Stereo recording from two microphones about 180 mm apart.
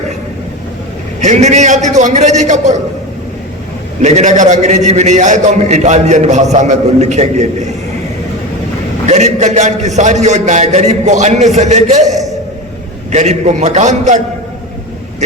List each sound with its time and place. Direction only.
1.2 s a man's voice: 40° right (ahead or behind)
4.0 s a man's voice: 40° right (ahead or behind)
9.0 s a man's voice: 40° right (ahead or behind)